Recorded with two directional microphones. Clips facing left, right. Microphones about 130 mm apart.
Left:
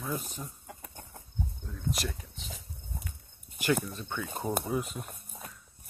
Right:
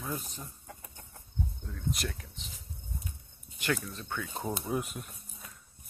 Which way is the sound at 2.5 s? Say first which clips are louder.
Left 3 dB; 90° left.